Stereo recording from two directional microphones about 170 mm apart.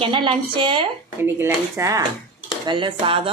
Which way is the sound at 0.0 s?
30° right (ahead or behind).